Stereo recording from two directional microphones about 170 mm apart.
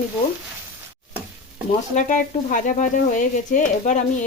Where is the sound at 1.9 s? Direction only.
45° left (ahead or behind).